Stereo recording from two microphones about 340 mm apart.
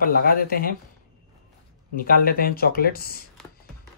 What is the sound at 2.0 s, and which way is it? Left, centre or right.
Speech, left.